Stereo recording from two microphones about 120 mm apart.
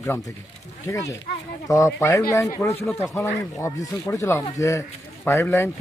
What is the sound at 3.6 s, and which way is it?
A man's voice, 25° left (ahead or behind).